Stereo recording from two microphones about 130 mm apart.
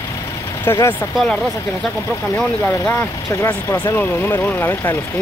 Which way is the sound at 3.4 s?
25° left (ahead or behind).